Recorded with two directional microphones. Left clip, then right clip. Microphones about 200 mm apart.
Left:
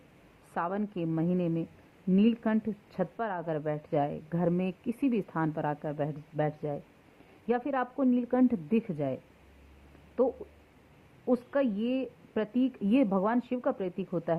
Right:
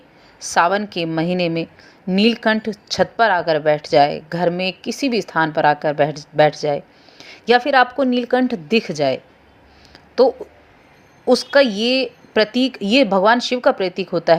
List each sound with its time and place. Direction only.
0.5 s speech: 20° right (ahead or behind)
11.3 s speech: 20° right (ahead or behind)